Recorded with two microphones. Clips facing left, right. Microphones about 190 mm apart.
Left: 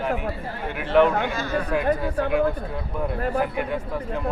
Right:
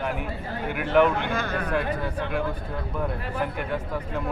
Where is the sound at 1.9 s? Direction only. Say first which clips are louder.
Left 4 dB; 10° left (ahead or behind).